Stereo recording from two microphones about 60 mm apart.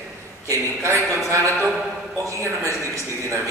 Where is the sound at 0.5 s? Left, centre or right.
Right.